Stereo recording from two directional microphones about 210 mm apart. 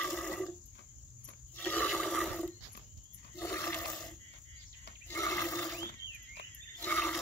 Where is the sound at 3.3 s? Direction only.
10° left (ahead or behind).